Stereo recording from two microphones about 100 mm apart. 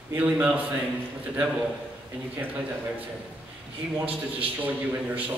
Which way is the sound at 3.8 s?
10° right (ahead or behind).